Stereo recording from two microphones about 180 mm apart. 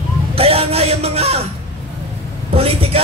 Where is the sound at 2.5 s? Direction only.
35° right (ahead or behind).